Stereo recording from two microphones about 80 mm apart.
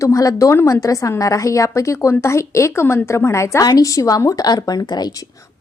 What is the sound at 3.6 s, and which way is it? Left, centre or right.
A woman's voice, left.